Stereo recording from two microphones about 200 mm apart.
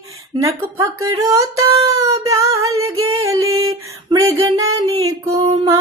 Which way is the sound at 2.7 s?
90° right.